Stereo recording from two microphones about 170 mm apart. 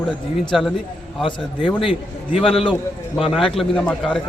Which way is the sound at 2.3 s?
Centre (ahead or behind).